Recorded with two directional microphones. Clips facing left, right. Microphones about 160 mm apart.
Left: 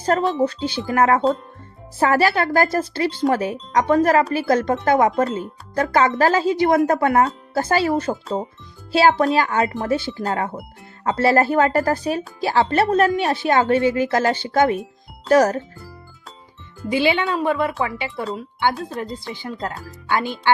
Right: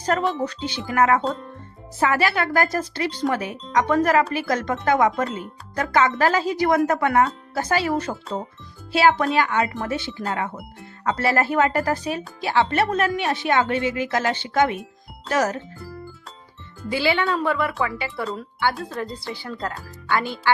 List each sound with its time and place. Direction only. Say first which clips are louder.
0.0 s speech: left 4 dB; 30° left (ahead or behind)
16.9 s speech: left 2 dB; 20° left (ahead or behind)